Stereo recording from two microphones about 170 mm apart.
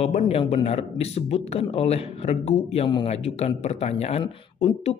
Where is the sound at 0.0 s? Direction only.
35° left (ahead or behind).